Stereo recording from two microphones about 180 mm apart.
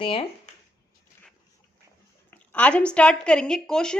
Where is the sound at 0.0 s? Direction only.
30° left (ahead or behind).